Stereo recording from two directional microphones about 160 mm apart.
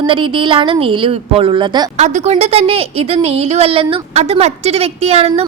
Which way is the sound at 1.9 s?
45° right (ahead or behind).